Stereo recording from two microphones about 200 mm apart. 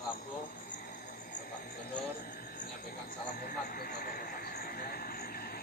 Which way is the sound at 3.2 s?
45° left (ahead or behind).